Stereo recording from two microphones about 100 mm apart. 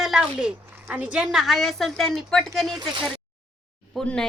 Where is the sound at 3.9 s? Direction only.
5° left (ahead or behind).